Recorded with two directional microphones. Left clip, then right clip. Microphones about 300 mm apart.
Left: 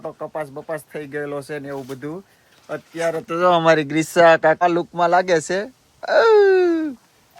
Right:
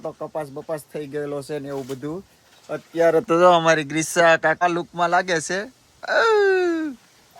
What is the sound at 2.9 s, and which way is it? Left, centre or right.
Speech, right.